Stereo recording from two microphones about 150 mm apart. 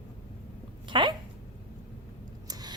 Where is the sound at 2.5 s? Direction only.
25° right (ahead or behind).